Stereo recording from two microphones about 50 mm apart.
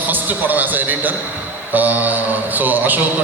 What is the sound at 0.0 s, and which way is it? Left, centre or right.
A man's voice, right.